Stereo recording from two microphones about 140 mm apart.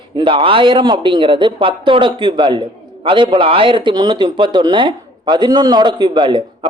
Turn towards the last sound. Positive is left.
turn(degrees=-35)  # may be behind; listen again after turning